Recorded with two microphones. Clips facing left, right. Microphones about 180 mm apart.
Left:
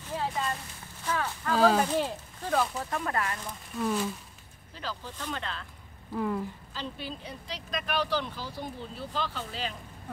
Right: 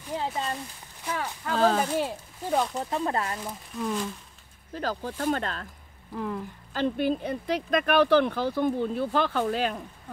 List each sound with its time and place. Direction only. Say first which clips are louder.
0.0 s a sound: right 2 dB; 15° right (ahead or behind)
1.0 s speech: even; 15° right (ahead or behind)
1.5 s speech: even; centre (ahead or behind)
1.9 s speech: right 1 dB; 10° right (ahead or behind)
2.8 s speech: right 3 dB; 25° right (ahead or behind)
3.7 s speech: left 1 dB; 5° left (ahead or behind)
4.7 s speech: right 8 dB; 45° right (ahead or behind)
6.1 s speech: left 2 dB; centre (ahead or behind)
6.7 s speech: right 13 dB; 55° right (ahead or behind)